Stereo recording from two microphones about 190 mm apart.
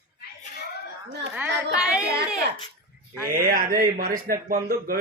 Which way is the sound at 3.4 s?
50° right (ahead or behind).